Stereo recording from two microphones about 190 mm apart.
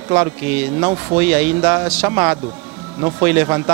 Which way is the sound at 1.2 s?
10° right (ahead or behind).